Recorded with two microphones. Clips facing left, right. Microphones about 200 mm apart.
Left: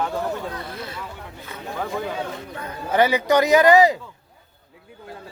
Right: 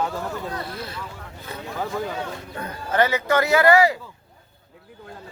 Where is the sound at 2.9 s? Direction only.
15° left (ahead or behind).